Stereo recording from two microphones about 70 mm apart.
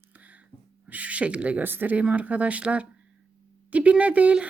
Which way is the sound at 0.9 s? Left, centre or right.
Right.